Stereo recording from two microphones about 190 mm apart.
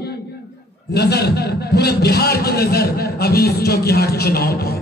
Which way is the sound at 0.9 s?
60° left (ahead or behind).